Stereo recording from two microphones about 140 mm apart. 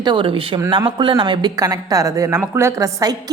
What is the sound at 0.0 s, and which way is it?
Speech, 35° right (ahead or behind).